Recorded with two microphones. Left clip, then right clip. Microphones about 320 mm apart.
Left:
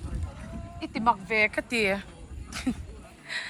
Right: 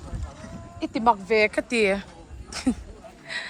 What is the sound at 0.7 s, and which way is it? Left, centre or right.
Speech, centre.